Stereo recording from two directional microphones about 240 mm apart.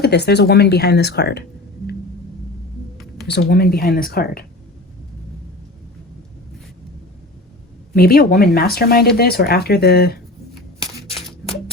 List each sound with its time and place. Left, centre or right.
0.0 s speech: left
3.2 s speech: left
7.9 s speech: left